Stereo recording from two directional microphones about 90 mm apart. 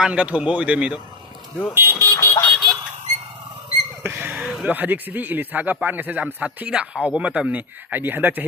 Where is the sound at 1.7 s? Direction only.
25° right (ahead or behind).